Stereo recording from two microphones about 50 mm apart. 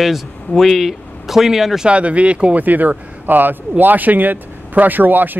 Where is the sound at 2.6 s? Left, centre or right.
Right.